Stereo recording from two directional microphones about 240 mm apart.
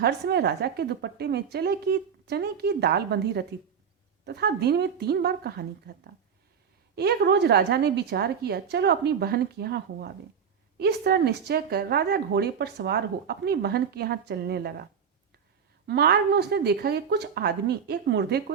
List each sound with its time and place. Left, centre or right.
0.0 s speech: right
6.9 s speech: right
15.9 s speech: right